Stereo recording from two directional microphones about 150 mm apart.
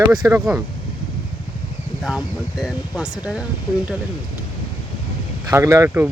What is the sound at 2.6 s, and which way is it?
Speech, 5° right (ahead or behind).